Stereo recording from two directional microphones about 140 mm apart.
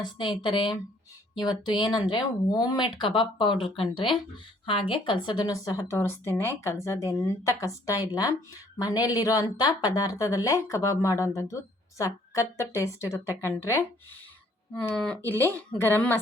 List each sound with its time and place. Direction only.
0.0 s a woman's voice: 35° left (ahead or behind); by 16.2 s 15° left (ahead or behind)